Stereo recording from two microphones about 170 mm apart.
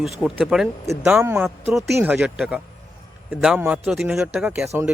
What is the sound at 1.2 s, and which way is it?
Speech, 15° right (ahead or behind).